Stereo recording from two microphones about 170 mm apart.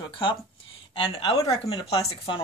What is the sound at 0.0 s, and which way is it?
Speech, 30° left (ahead or behind).